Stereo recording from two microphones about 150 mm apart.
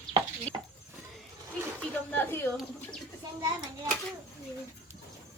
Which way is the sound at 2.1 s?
15° left (ahead or behind).